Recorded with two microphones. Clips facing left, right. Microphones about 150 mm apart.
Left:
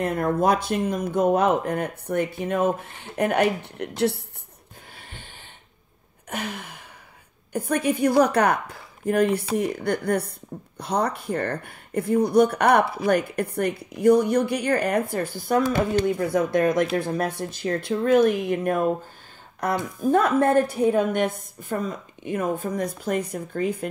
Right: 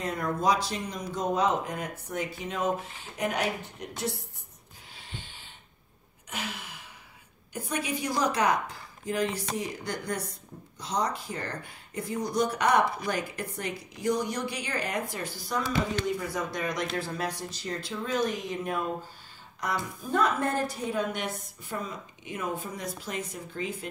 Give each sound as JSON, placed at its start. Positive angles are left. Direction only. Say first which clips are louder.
{"t": 0.0, "sound": "speech", "louder": "left 6 dB", "side_deg": 55}
{"t": 6.3, "sound": "a woman's voice", "louder": "left 6 dB", "side_deg": 55}